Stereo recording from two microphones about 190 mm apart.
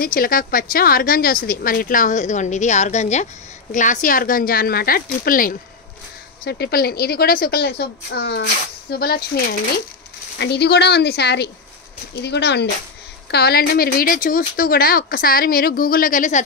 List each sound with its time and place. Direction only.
0.0 s a woman's voice: 50° left (ahead or behind)